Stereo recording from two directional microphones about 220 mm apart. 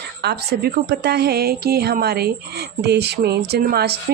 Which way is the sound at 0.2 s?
50° right (ahead or behind).